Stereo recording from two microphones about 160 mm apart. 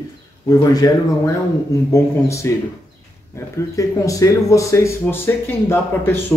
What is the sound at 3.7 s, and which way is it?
Speech, 20° left (ahead or behind).